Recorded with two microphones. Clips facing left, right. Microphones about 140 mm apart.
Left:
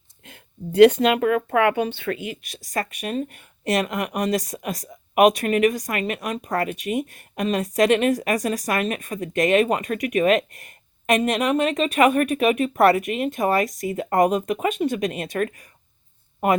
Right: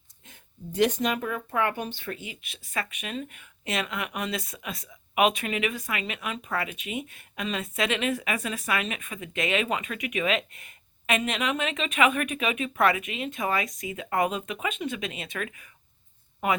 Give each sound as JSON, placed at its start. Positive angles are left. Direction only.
{"t": 0.3, "sound": "speech", "side_deg": 65}
{"t": 2.5, "sound": "speech", "side_deg": 40}